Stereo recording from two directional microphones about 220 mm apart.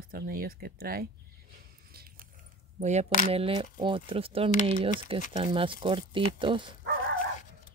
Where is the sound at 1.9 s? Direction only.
45° right (ahead or behind).